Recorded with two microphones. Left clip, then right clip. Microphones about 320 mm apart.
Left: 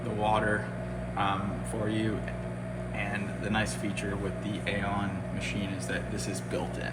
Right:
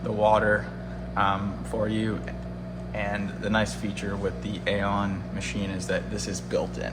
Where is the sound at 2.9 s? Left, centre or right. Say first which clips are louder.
Right 5 dB; right.